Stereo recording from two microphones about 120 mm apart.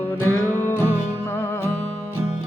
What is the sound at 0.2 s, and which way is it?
Music, 20° left (ahead or behind).